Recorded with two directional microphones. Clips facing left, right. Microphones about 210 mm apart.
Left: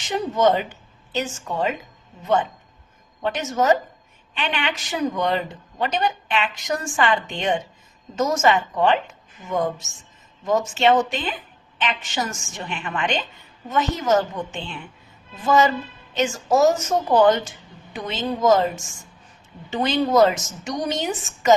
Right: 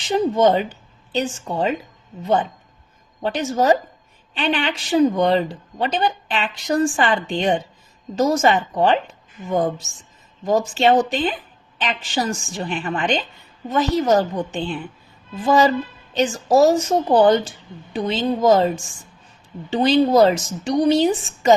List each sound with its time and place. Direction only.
0.0 s speech: 30° right (ahead or behind)